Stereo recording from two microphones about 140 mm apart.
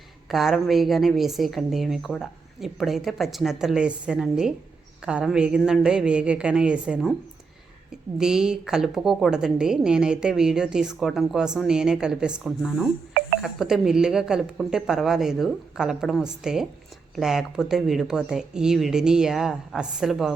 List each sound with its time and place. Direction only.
0.3 s a woman's voice: centre (ahead or behind)
8.2 s a woman's voice: 5° right (ahead or behind)